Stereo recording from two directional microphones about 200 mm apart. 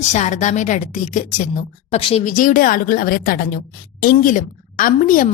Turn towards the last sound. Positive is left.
turn(degrees=40)  # may be behind; listen again after turning